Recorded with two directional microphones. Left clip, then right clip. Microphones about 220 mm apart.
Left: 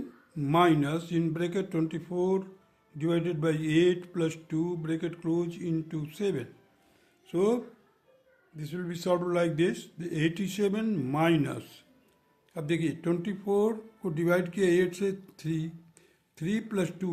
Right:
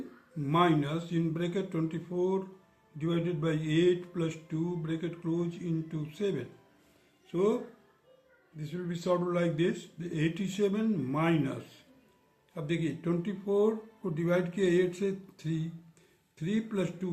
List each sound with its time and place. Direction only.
0.3 s mantra: 55° left (ahead or behind)
7.3 s speech: 55° left (ahead or behind)
8.5 s mantra: 55° left (ahead or behind)